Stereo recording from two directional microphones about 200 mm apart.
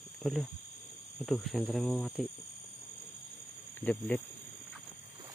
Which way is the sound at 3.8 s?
10° left (ahead or behind).